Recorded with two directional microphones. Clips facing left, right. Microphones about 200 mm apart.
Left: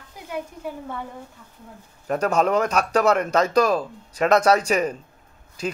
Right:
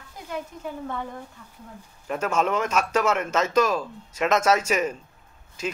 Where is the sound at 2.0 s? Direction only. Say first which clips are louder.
Left 4 dB; 40° left (ahead or behind).